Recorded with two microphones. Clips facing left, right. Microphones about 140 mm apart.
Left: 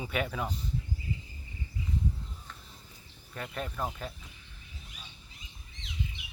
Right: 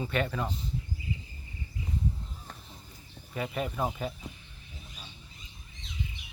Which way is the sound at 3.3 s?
5° right (ahead or behind).